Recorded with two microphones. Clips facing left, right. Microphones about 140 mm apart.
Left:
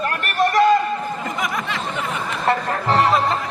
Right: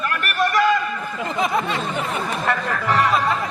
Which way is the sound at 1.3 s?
25° right (ahead or behind).